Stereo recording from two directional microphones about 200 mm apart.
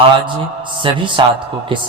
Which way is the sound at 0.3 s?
25° right (ahead or behind).